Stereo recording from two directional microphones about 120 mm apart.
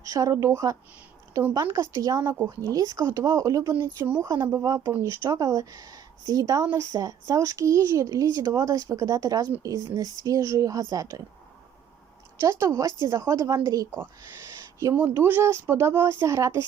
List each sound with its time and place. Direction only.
0.0 s a woman's voice: 30° right (ahead or behind)
12.4 s speech: 25° right (ahead or behind)
14.9 s speech: 15° right (ahead or behind)